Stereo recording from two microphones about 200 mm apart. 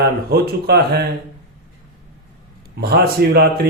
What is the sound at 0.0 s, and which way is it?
Speech, 50° right (ahead or behind).